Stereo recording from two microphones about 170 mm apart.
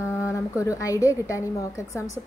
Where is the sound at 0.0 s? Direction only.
15° left (ahead or behind).